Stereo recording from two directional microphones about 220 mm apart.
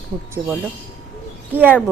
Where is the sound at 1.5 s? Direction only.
10° right (ahead or behind).